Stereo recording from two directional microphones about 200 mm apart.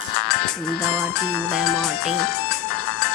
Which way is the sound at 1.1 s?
Centre (ahead or behind).